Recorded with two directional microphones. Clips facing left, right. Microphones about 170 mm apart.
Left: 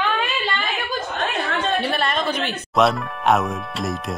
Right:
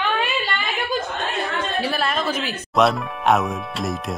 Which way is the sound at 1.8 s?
5° right (ahead or behind).